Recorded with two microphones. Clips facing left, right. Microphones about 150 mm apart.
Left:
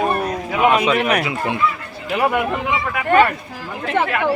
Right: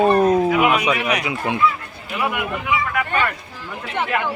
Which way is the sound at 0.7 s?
10° right (ahead or behind).